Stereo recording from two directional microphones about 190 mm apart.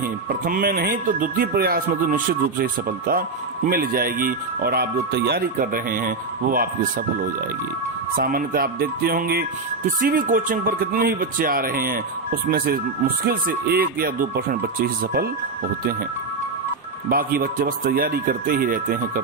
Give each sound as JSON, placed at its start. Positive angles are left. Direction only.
{"t": 0.0, "sound": "speech", "side_deg": -50}
{"t": 8.2, "sound": "speech", "side_deg": -50}
{"t": 17.1, "sound": "speech", "side_deg": -50}